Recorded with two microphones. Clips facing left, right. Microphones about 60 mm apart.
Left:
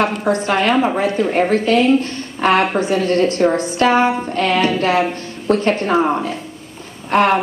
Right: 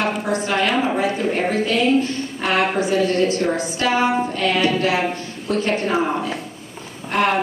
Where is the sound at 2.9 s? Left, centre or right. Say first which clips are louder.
Left 2 dB; left.